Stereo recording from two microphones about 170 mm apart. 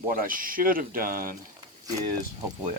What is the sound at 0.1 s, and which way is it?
Speech, 55° right (ahead or behind).